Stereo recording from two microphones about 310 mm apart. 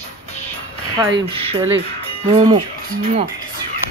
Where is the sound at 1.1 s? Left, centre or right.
Centre.